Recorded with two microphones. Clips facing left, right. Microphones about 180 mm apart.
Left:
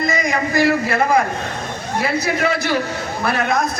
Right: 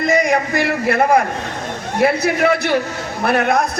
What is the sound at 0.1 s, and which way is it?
A man's voice, 60° right (ahead or behind).